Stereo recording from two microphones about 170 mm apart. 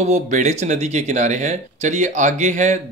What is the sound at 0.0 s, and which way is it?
A man's voice, 45° right (ahead or behind).